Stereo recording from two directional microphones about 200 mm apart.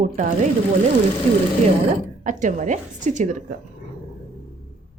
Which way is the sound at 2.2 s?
40° right (ahead or behind).